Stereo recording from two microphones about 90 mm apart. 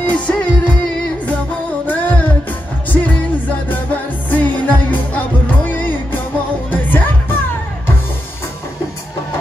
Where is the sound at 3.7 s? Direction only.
15° left (ahead or behind).